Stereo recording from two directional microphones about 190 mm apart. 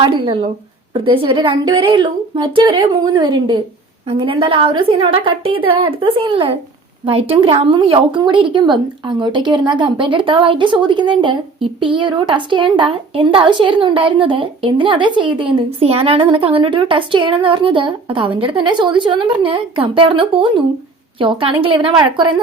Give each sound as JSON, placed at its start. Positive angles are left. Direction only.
{"t": 0.0, "sound": "a woman's voice", "side_deg": -25}